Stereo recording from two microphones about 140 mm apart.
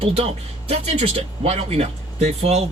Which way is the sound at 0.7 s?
50° right (ahead or behind).